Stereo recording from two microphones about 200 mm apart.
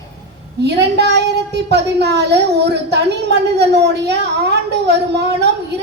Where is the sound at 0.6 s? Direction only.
55° right (ahead or behind).